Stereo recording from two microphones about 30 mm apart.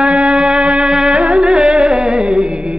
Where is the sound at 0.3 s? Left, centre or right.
Right.